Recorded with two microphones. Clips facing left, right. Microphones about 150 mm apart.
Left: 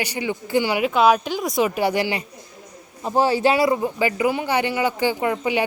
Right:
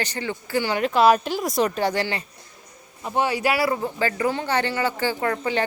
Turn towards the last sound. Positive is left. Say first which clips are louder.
# left 2 dB
turn(degrees=15)  # may be behind; listen again after turning